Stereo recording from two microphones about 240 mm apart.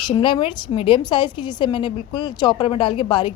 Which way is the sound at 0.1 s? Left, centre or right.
Left.